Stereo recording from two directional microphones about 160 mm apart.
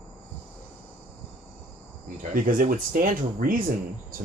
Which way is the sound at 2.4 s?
60° right (ahead or behind).